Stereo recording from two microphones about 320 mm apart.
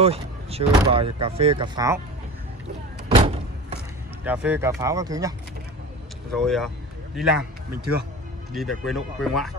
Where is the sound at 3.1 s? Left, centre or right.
Centre.